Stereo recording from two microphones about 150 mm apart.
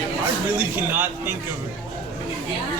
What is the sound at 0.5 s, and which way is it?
Speech, 15° right (ahead or behind).